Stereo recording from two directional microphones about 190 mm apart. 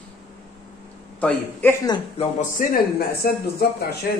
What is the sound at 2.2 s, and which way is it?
Speech, 40° left (ahead or behind).